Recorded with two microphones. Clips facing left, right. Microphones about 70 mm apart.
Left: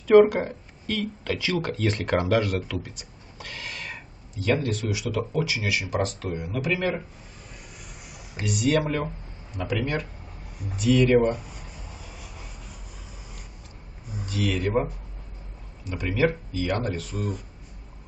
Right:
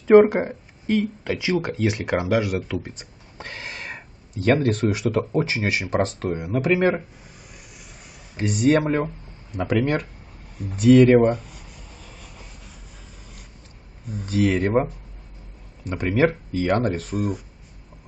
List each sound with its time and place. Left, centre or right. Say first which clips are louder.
0.0 s speech: right 2 dB; right
2.8 s a sound: right 3 dB; right
4.4 s speech: right 6 dB; right
8.4 s speech: right 5 dB; right
9.6 s speech: right 6 dB; right
12.0 s vehicle: left 1 dB; centre
14.2 s speech: right 6 dB; right
17.1 s speech: right 6 dB; centre